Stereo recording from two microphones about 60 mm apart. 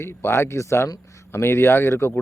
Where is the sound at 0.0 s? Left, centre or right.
Left.